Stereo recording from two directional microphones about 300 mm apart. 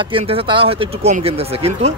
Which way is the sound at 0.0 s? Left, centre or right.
Centre.